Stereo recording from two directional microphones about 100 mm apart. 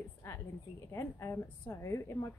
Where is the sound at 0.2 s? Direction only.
25° left (ahead or behind).